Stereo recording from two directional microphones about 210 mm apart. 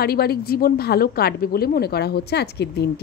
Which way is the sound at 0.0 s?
45° left (ahead or behind).